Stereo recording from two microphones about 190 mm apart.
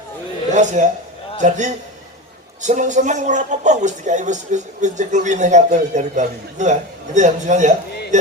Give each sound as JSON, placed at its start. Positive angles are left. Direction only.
{"t": 0.5, "sound": "speech", "side_deg": -40}